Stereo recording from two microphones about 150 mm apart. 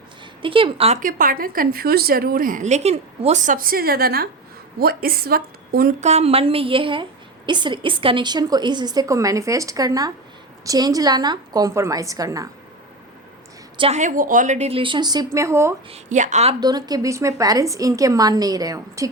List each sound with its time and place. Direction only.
0.4 s a woman's voice: 35° right (ahead or behind)
0.9 s a woman's voice: 65° right (ahead or behind); by 5.9 s 90° right
6.0 s a woman's voice: 45° right (ahead or behind); by 12.5 s 25° right (ahead or behind)
13.7 s a woman's voice: 40° right (ahead or behind)
14.0 s a woman's voice: 60° right (ahead or behind); by 15.7 s 20° right (ahead or behind)
15.9 s speech: 55° right (ahead or behind)
16.6 s a woman's voice: 25° right (ahead or behind)